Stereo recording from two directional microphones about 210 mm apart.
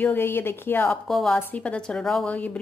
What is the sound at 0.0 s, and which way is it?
A woman's voice, 10° left (ahead or behind).